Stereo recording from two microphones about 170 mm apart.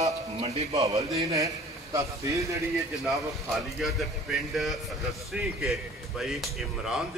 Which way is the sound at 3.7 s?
Centre (ahead or behind).